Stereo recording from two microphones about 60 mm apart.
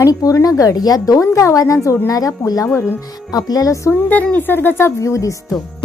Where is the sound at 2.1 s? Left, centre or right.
Left.